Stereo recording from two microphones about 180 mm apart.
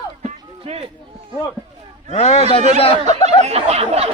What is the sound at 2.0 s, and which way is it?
Speech, 35° left (ahead or behind).